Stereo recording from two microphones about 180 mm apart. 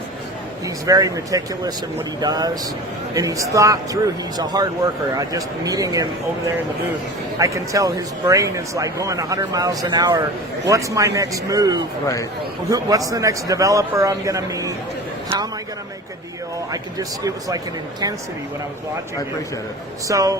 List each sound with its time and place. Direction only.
0.9 s speech: 20° right (ahead or behind)
7.3 s a man's voice: 15° right (ahead or behind)
16.7 s speech: 20° right (ahead or behind)
20.1 s speech: 20° right (ahead or behind)